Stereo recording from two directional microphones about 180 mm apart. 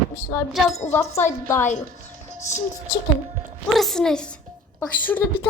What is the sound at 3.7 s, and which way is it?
A child's voice, centre (ahead or behind).